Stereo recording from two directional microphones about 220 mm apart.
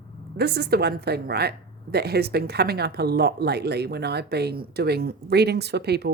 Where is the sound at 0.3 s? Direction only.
45° right (ahead or behind).